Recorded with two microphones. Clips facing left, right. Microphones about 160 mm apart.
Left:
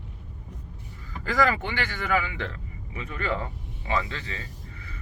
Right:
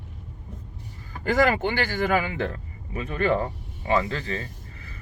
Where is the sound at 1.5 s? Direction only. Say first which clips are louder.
Right 4 dB; 30° right (ahead or behind).